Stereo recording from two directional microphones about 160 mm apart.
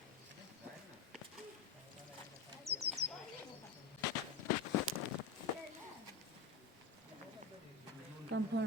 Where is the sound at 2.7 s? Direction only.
40° right (ahead or behind).